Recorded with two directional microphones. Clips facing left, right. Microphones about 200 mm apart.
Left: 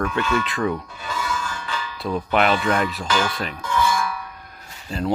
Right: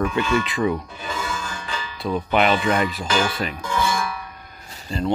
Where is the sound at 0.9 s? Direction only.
25° right (ahead or behind).